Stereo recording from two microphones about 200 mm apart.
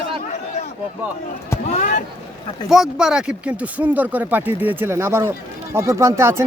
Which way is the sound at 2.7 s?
Centre (ahead or behind).